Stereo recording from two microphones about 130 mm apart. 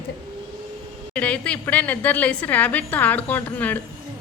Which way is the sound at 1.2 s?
10° left (ahead or behind).